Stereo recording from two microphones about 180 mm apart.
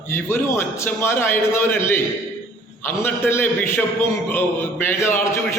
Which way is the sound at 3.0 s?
15° left (ahead or behind).